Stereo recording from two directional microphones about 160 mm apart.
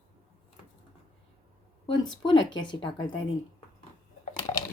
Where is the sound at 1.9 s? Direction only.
30° left (ahead or behind).